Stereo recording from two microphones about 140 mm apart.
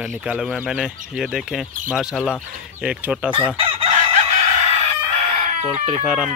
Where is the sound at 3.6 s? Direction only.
40° right (ahead or behind).